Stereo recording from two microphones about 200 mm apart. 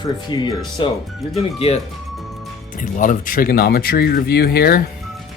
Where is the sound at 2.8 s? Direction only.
40° left (ahead or behind).